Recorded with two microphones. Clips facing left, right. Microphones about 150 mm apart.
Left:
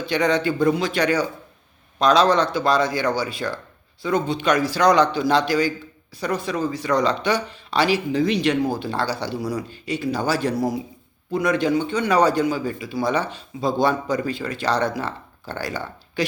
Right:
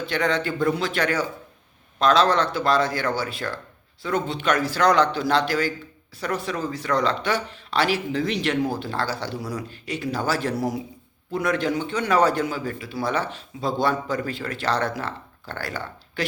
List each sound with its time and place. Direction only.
0.1 s speech: 15° left (ahead or behind)